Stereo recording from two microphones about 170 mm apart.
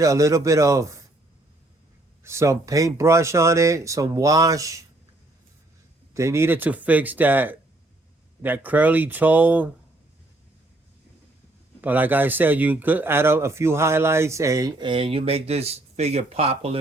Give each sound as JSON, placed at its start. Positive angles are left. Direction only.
{"t": 0.0, "sound": "speech", "side_deg": -20}
{"t": 2.2, "sound": "speech", "side_deg": -15}
{"t": 6.1, "sound": "speech", "side_deg": -15}
{"t": 11.8, "sound": "speech", "side_deg": -10}